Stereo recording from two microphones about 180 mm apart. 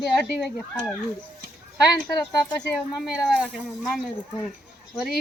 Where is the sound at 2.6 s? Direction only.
Centre (ahead or behind).